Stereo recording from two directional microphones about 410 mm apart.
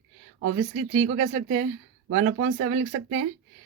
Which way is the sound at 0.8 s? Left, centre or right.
Centre.